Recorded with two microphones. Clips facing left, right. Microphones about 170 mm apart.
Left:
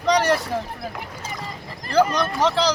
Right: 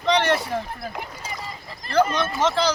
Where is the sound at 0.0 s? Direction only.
40° left (ahead or behind).